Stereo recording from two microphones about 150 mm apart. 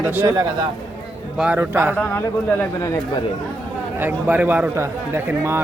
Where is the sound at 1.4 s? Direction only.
10° right (ahead or behind).